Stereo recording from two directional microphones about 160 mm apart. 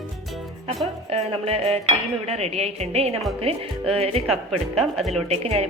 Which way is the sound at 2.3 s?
40° right (ahead or behind).